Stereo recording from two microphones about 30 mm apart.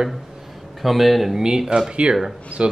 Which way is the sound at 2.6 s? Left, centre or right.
Right.